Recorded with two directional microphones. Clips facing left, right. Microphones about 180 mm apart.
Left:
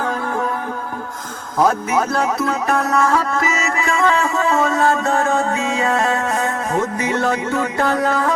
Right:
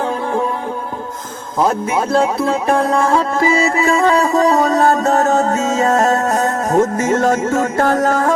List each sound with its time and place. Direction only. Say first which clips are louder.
1.6 s music: right 1 dB; 25° right (ahead or behind); by 8.3 s 45° right (ahead or behind)